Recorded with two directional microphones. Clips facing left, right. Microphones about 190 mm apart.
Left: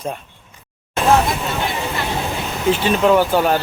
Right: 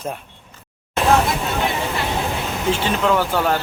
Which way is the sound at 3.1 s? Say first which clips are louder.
Left 4 dB; 15° left (ahead or behind).